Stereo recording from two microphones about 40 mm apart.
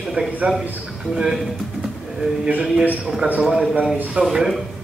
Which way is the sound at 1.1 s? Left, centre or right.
Centre.